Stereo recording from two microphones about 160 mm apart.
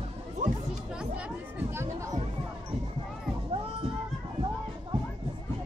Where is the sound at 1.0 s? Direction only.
10° right (ahead or behind).